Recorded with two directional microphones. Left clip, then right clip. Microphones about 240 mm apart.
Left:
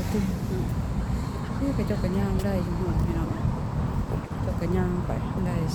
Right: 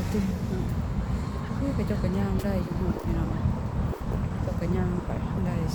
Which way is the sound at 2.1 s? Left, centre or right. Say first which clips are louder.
Left 1 dB; centre.